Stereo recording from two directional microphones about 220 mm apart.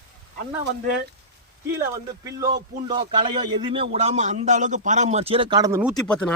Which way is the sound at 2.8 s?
20° right (ahead or behind).